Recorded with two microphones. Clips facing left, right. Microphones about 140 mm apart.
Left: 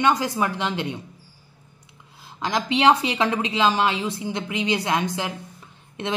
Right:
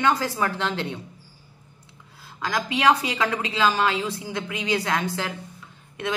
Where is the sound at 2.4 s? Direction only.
25° left (ahead or behind).